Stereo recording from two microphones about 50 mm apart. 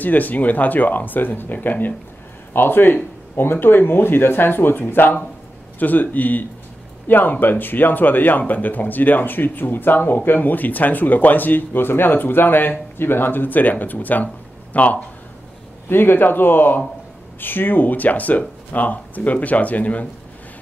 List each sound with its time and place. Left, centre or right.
0.0 s speech: left
15.9 s speech: left